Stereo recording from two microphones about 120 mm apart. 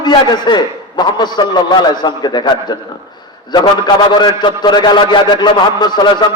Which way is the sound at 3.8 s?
35° left (ahead or behind).